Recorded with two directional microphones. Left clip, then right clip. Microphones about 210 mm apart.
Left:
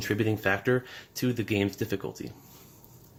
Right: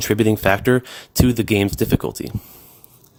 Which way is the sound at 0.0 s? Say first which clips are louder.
Right 10 dB; 60° right (ahead or behind).